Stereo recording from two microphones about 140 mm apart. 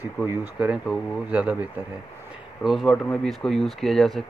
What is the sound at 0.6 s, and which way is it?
Speech, 10° right (ahead or behind).